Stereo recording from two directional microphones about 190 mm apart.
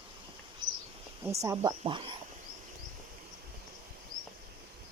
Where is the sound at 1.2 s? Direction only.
15° right (ahead or behind).